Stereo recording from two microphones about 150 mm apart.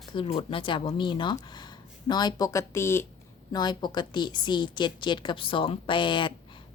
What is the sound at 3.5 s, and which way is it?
A woman's voice, 30° left (ahead or behind).